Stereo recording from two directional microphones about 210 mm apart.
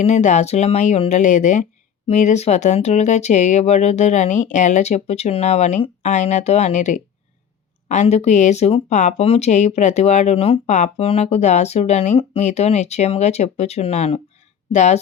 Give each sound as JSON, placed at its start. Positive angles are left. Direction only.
{"t": 0.0, "sound": "speech", "side_deg": 35}